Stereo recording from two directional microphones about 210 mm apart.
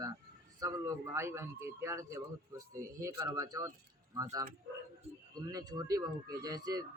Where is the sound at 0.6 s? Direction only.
15° right (ahead or behind).